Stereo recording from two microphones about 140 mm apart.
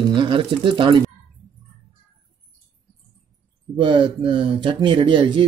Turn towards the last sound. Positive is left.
turn(degrees=-35)  # may be behind; listen again after turning